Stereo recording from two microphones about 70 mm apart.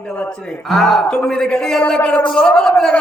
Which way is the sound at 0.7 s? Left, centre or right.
Centre.